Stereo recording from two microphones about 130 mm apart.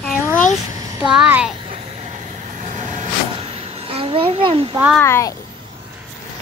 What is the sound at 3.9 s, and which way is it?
Speech, 45° right (ahead or behind).